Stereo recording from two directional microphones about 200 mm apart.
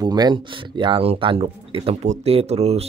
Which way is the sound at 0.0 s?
20° right (ahead or behind).